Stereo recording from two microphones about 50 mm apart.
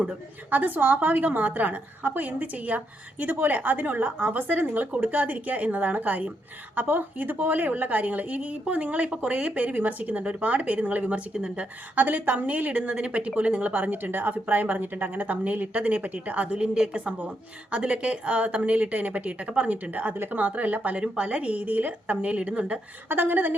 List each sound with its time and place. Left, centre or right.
0.5 s a woman's voice: right
23.0 s a woman's voice: right